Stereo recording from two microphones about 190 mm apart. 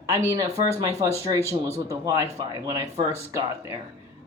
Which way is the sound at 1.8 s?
15° right (ahead or behind).